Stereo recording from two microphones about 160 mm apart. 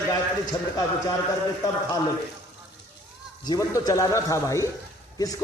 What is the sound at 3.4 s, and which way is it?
A man's voice, 25° left (ahead or behind).